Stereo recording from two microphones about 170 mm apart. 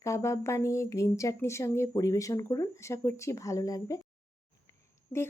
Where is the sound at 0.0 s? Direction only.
15° left (ahead or behind).